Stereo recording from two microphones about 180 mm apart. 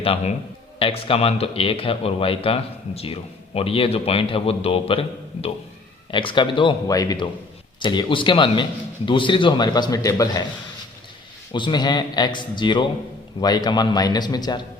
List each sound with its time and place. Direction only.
0.0 s a man's voice: 30° left (ahead or behind)
11.5 s a man's voice: 25° left (ahead or behind)